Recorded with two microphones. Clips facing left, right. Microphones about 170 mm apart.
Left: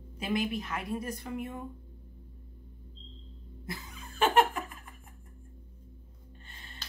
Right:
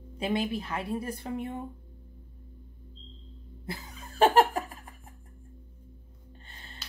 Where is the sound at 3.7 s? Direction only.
35° right (ahead or behind).